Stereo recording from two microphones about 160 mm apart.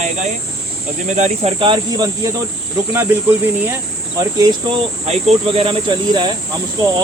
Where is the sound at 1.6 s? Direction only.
30° right (ahead or behind).